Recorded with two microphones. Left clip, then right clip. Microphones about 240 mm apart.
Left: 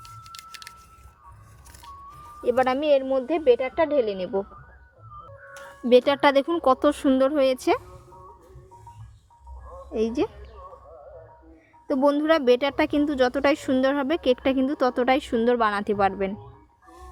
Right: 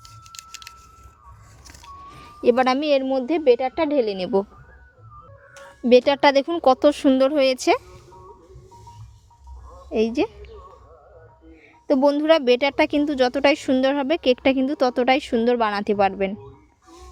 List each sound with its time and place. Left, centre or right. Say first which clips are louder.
0.0 s a sound: even; centre
2.1 s a woman's voice: right 4 dB; right
5.8 s speech: right 3 dB; right
9.9 s speech: right 4 dB; right
11.9 s speech: right 4 dB; right